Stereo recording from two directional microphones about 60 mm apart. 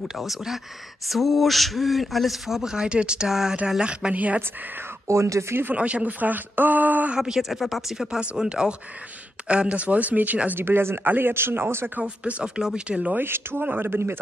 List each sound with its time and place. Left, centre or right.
0.1 s speech: centre; by 4.4 s right
5.0 s speech: right
5.7 s speech: right
7.2 s speech: centre; by 10.6 s right
10.6 s speech: right
12.0 s speech: right
13.2 s speech: right